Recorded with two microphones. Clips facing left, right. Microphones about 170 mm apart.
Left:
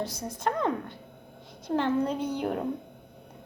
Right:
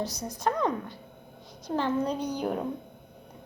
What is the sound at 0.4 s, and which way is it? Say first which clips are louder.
Speech: right 1 dB; 60° left (ahead or behind).